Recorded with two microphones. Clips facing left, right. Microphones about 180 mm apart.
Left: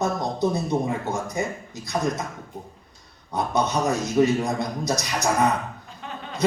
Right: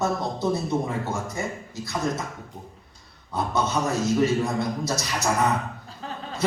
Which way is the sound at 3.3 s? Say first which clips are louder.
Left 2 dB; 20° left (ahead or behind).